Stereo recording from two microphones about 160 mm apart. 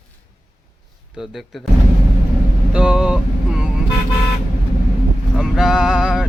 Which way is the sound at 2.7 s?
5° right (ahead or behind).